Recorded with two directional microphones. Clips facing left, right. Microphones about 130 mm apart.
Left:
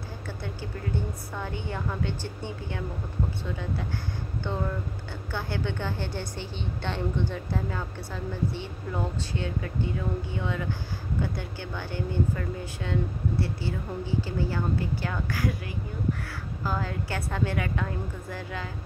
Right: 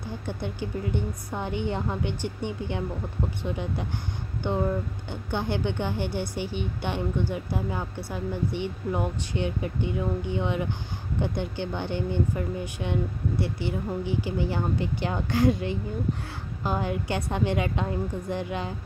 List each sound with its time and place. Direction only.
0.3 s a woman's voice: 20° right (ahead or behind)